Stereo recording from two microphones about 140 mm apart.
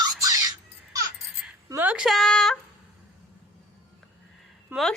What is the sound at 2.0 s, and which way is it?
Speech, centre (ahead or behind).